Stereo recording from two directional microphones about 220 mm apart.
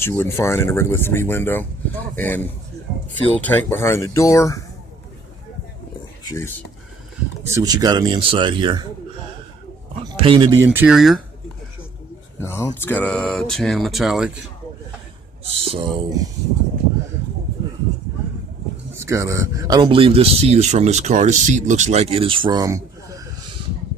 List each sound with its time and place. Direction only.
0.0 s speech: 10° left (ahead or behind)
6.2 s speech: 15° left (ahead or behind)
7.5 s speech: 15° right (ahead or behind)
10.1 s speech: 25° right (ahead or behind)
10.7 s speech: 5° right (ahead or behind)
12.4 s speech: 10° left (ahead or behind)
15.6 s speech: 25° right (ahead or behind)
19.0 s speech: 15° right (ahead or behind)